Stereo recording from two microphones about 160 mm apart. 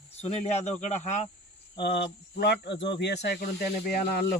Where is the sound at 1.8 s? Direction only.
90° left; by 4.2 s 70° left (ahead or behind).